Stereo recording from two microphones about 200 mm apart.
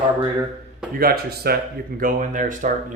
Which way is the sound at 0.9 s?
50° right (ahead or behind).